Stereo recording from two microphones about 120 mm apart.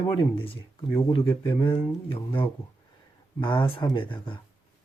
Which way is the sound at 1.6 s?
50° left (ahead or behind).